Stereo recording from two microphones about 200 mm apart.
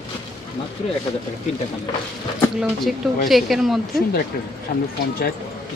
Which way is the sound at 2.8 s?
Centre (ahead or behind).